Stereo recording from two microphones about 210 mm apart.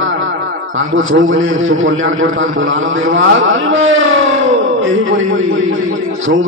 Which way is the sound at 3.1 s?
65° right (ahead or behind).